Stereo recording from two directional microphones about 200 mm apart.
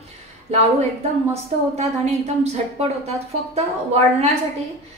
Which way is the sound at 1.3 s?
35° right (ahead or behind).